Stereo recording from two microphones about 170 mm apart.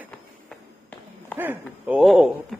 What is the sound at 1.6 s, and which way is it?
Speech, 5° right (ahead or behind).